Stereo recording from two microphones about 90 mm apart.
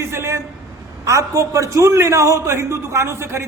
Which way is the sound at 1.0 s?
35° right (ahead or behind).